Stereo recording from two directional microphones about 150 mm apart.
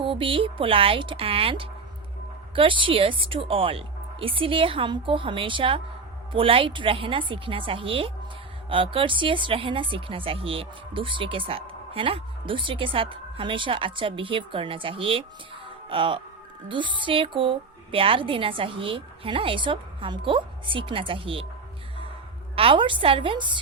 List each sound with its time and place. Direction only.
0.0 s a woman's voice: 35° right (ahead or behind)
22.5 s a woman's voice: 35° right (ahead or behind)